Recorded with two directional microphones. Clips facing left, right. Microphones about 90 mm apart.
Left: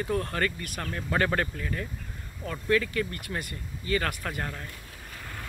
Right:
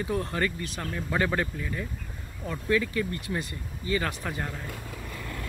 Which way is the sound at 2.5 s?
15° right (ahead or behind).